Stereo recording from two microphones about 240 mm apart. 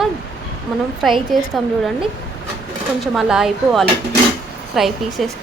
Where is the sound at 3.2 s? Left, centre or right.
Centre.